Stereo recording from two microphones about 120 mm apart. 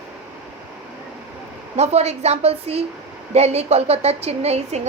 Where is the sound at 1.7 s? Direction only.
65° right (ahead or behind).